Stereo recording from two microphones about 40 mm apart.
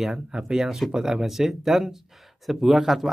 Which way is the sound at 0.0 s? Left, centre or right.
Centre.